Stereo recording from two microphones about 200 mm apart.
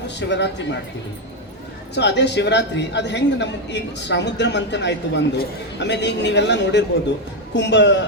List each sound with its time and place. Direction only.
0.2 s a man's voice: 60° left (ahead or behind)
2.0 s a man's voice: 60° left (ahead or behind)